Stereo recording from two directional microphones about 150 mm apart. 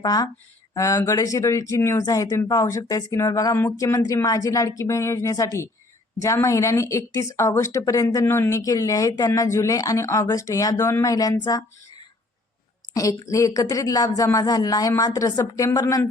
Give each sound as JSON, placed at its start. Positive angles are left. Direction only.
{"t": 0.0, "sound": "speech", "side_deg": 25}
{"t": 12.9, "sound": "speech", "side_deg": 20}